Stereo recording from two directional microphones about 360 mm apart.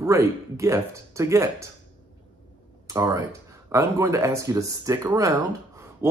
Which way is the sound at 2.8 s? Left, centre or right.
Centre.